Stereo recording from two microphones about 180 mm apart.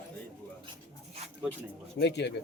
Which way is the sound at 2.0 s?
70° left (ahead or behind).